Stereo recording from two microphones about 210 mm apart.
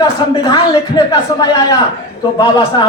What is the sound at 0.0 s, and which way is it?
A man's voice, 20° left (ahead or behind).